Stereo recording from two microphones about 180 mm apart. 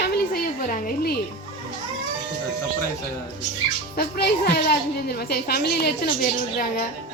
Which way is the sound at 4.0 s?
60° left (ahead or behind).